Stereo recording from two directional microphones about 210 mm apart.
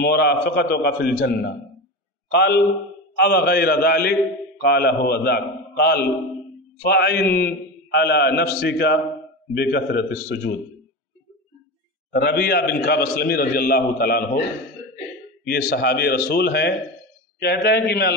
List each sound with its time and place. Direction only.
0.0 s a man's voice: 50° left (ahead or behind)
12.1 s a man's voice: 50° left (ahead or behind)
15.4 s a man's voice: 50° left (ahead or behind)